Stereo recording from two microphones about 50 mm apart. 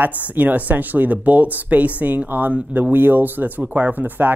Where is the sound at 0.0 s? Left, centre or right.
Right.